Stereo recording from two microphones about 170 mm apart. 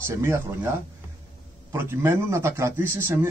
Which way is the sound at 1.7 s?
15° right (ahead or behind).